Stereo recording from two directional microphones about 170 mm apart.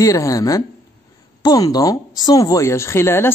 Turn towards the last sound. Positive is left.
turn(degrees=15)  # may be behind; listen again after turning